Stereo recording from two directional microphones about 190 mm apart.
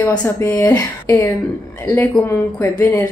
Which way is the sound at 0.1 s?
10° left (ahead or behind).